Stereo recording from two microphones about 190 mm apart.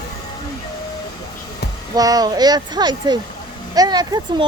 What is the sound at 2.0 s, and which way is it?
Speech, 20° right (ahead or behind).